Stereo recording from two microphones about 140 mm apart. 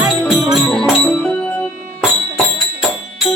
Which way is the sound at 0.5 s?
5° left (ahead or behind).